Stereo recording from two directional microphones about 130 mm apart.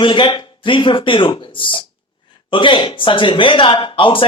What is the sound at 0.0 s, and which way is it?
Speech, 40° left (ahead or behind).